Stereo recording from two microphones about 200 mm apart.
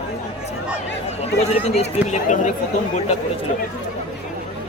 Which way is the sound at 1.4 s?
30° left (ahead or behind).